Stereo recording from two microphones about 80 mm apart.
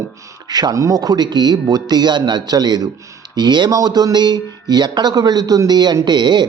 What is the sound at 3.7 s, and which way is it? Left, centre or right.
Speech, right.